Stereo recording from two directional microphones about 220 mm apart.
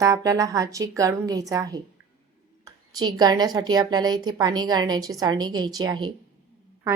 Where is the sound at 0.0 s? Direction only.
15° right (ahead or behind).